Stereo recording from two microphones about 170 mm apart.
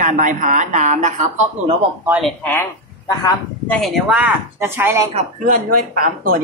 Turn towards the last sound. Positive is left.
turn(degrees=-55)  # may be behind; listen again after turning